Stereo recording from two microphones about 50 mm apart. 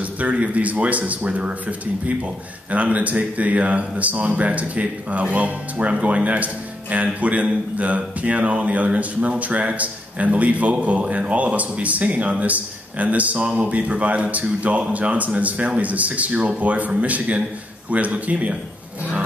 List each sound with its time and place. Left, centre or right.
0.0 s speech: right